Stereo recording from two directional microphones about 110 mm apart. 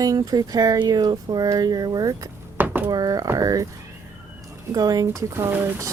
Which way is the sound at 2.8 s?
35° right (ahead or behind).